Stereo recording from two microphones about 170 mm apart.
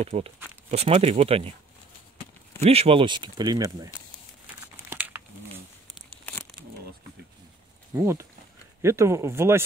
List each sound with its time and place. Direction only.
0.0 s speech: 40° right (ahead or behind)
2.6 s speech: 35° right (ahead or behind)
4.8 s crumpling: 10° right (ahead or behind)
7.9 s speech: 15° right (ahead or behind)